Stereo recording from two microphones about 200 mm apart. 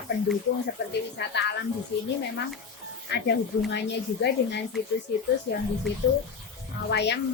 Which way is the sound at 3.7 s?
55° left (ahead or behind).